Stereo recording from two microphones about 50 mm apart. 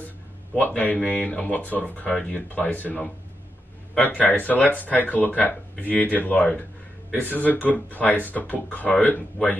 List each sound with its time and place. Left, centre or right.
0.6 s speech: left
2.5 s speech: left